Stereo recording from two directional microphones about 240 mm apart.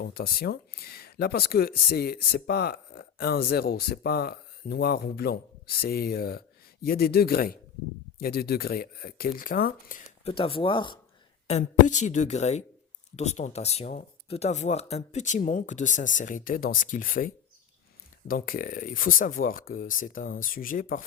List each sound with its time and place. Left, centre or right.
0.0 s speech: left
10.3 s speech: left